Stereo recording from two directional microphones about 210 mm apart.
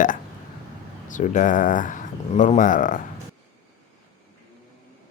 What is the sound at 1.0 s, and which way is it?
Speech, 35° left (ahead or behind).